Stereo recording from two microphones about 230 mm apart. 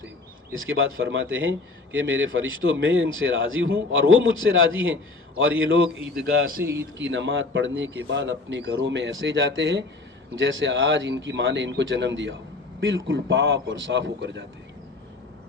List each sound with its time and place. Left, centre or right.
0.5 s a man's voice: right
7.0 s a man's voice: right